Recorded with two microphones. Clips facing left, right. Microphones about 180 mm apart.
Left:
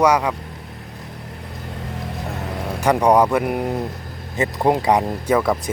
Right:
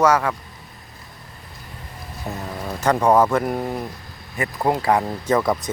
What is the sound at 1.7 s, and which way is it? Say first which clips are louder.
Vehicle: left 9 dB; 80° left.